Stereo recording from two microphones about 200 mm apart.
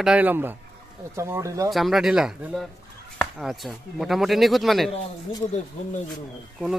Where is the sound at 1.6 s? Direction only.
Centre (ahead or behind).